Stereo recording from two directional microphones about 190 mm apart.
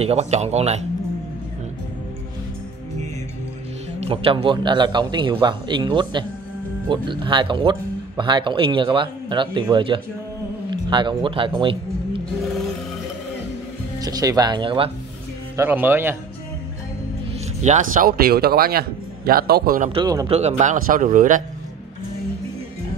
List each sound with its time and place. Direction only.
0.0 s speech: 35° right (ahead or behind)
4.0 s a man's voice: 30° right (ahead or behind)
13.9 s a man's voice: 20° right (ahead or behind)
15.5 s speech: 10° right (ahead or behind)
17.6 s speech: 40° right (ahead or behind)
19.9 s a man's voice: 20° right (ahead or behind)
20.2 s speech: 35° right (ahead or behind)